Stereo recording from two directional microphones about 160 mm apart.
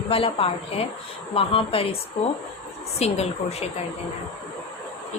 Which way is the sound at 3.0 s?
40° left (ahead or behind).